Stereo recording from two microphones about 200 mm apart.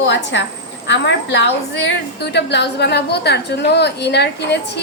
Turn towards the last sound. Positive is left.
turn(degrees=60)  # may be behind; listen again after turning